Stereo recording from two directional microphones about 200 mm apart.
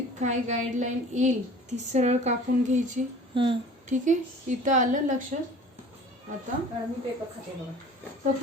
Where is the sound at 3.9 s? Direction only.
40° right (ahead or behind).